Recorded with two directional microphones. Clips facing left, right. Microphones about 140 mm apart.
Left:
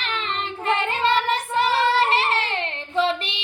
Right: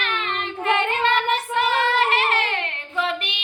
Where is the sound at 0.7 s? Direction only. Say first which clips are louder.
Right 1 dB; 35° left (ahead or behind).